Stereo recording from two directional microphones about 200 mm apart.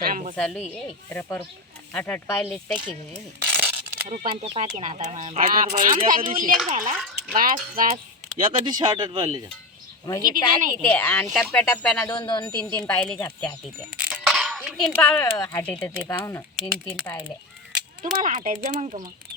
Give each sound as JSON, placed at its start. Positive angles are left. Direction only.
{"t": 0.1, "sound": "a sound", "side_deg": -40}
{"t": 0.3, "sound": "speech", "side_deg": 5}
{"t": 1.1, "sound": "speech", "side_deg": 15}
{"t": 3.4, "sound": "a sound", "side_deg": -10}
{"t": 4.1, "sound": "speech", "side_deg": -30}
{"t": 5.5, "sound": "speech", "side_deg": -45}
{"t": 8.4, "sound": "speech", "side_deg": -20}
{"t": 10.2, "sound": "speech", "side_deg": -45}
{"t": 10.8, "sound": "speech", "side_deg": 5}
{"t": 12.1, "sound": "speech", "side_deg": 20}
{"t": 12.6, "sound": "speech", "side_deg": 5}
{"t": 13.9, "sound": "a sound", "side_deg": -5}
{"t": 14.9, "sound": "speech", "side_deg": 10}
{"t": 18.0, "sound": "speech", "side_deg": -40}